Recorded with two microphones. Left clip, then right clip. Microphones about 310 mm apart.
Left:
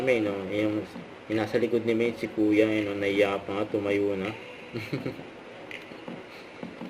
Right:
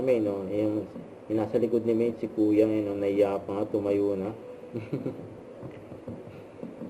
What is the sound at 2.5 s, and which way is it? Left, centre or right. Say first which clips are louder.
A man's voice: left 1 dB; left.